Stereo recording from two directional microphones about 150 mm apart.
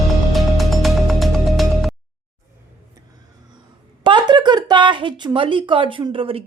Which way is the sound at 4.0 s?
30° right (ahead or behind).